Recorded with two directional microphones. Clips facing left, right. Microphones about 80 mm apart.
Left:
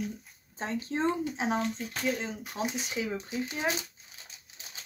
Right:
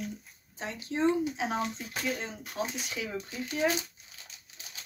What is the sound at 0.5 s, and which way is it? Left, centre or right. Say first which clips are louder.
Speech: left 1 dB; left.